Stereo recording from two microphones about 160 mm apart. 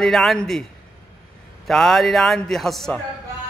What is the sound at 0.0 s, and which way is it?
Speech, centre (ahead or behind).